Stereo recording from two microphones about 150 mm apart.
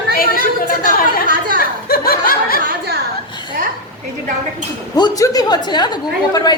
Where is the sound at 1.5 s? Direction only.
80° left.